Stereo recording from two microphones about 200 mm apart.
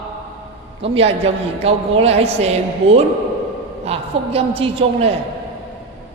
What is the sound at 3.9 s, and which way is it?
A man's voice, 30° right (ahead or behind).